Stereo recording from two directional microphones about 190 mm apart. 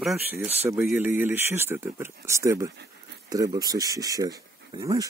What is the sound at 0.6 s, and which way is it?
Speech, 15° right (ahead or behind).